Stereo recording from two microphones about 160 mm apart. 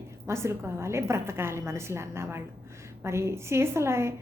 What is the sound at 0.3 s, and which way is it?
A woman's voice, 15° right (ahead or behind).